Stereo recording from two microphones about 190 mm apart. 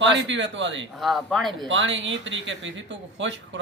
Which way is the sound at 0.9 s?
Centre (ahead or behind).